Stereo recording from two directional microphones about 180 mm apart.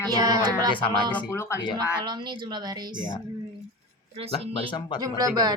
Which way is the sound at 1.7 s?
25° right (ahead or behind).